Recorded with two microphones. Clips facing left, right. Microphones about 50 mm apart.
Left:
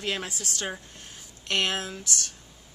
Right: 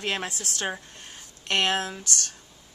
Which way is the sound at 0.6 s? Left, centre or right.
Centre.